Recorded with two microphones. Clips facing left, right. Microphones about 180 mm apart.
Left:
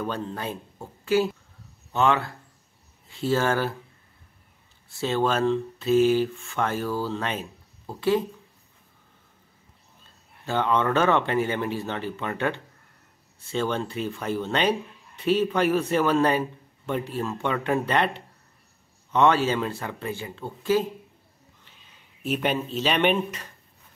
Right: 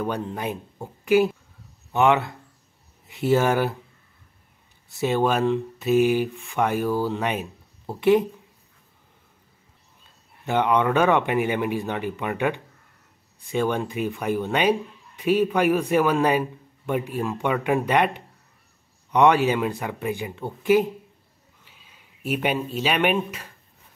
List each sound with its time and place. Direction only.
0.0 s speech: 15° right (ahead or behind)
4.8 s speech: 15° right (ahead or behind)
10.4 s speech: 15° right (ahead or behind)